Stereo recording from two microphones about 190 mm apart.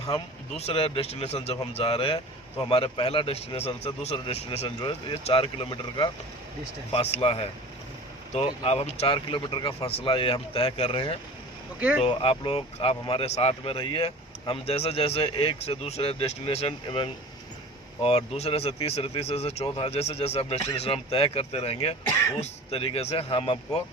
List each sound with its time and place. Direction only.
0.5 s speech: 30° left (ahead or behind)
8.4 s speech: 30° left (ahead or behind)
11.8 s speech: 10° right (ahead or behind)
12.0 s speech: 30° left (ahead or behind)
18.3 s speech: 30° left (ahead or behind)